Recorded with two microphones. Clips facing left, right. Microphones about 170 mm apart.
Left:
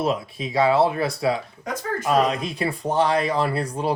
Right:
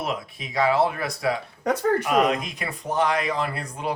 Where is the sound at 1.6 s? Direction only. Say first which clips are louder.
Right 9 dB; 65° right (ahead or behind).